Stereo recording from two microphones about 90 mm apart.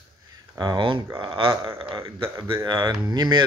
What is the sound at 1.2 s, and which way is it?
A man's voice, 80° right.